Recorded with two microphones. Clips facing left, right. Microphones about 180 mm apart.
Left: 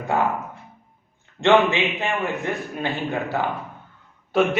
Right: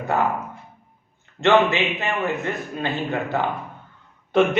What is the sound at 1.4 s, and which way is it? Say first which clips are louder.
A man's voice: even; 15° left (ahead or behind).